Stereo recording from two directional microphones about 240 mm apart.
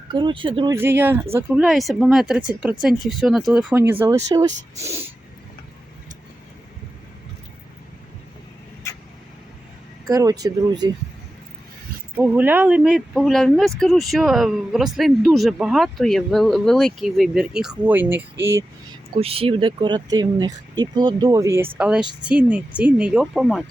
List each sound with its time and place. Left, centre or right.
0.1 s speech: centre
10.1 s speech: centre
12.1 s speech: centre
19.1 s speech: right; by 23.6 s centre